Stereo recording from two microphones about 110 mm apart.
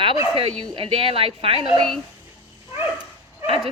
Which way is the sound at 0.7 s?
55° right (ahead or behind).